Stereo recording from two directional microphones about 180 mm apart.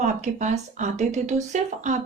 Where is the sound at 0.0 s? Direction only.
40° right (ahead or behind).